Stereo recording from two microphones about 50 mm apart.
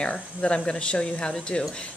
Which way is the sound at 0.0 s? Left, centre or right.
Left.